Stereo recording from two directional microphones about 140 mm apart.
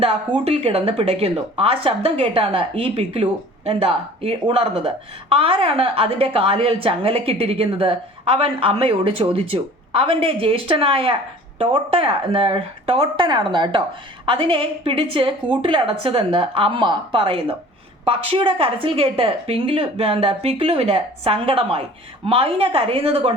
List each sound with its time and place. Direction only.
0.0 s a woman's voice: 40° right (ahead or behind)